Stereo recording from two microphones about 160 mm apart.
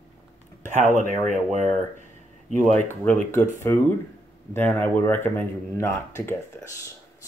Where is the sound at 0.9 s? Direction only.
50° right (ahead or behind).